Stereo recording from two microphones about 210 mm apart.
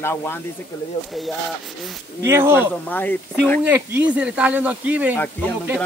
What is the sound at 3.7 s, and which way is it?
Speech, 5° right (ahead or behind).